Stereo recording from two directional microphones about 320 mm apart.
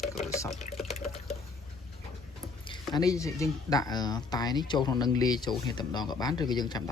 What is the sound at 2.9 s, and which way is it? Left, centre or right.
Speech, centre.